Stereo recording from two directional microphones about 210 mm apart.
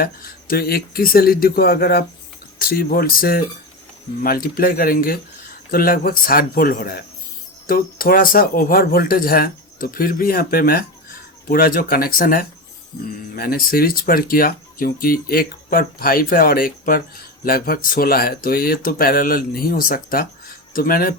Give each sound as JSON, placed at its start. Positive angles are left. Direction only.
{"t": 0.0, "sound": "speech", "side_deg": 45}